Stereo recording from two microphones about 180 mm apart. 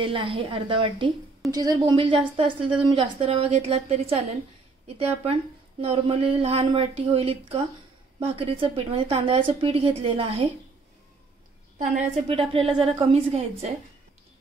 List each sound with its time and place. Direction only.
0.0 s a woman's voice: 30° right (ahead or behind)
12.3 s a woman's voice: 30° right (ahead or behind)